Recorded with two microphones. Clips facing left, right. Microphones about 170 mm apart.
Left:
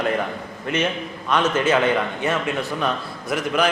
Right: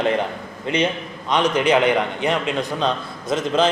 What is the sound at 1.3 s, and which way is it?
A man's voice, 15° right (ahead or behind).